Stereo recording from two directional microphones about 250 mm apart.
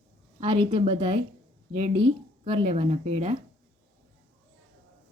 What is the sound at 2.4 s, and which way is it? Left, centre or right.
Speech, right.